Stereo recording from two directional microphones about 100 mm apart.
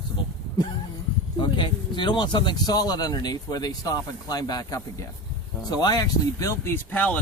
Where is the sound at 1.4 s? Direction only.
55° left (ahead or behind).